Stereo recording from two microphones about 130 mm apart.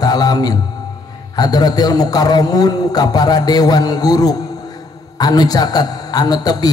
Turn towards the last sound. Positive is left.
turn(degrees=30)  # may be behind; listen again after turning